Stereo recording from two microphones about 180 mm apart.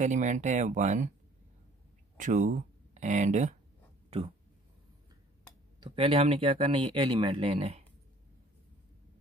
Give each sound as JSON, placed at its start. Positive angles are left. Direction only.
{"t": 0.0, "sound": "speech", "side_deg": -45}
{"t": 2.1, "sound": "speech", "side_deg": -45}
{"t": 5.8, "sound": "speech", "side_deg": -30}